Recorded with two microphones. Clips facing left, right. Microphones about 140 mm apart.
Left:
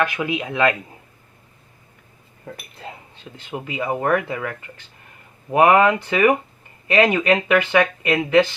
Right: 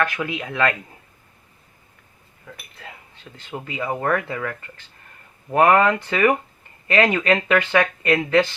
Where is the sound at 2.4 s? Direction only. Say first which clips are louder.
Left 5 dB; 35° left (ahead or behind).